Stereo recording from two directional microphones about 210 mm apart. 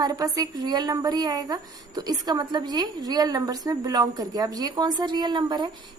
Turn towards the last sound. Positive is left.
turn(degrees=-20)  # may be behind; listen again after turning